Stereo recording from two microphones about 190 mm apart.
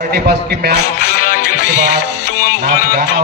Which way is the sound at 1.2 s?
50° left (ahead or behind).